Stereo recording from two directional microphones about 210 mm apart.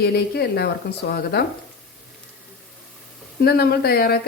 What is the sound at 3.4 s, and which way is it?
Speech, 50° left (ahead or behind).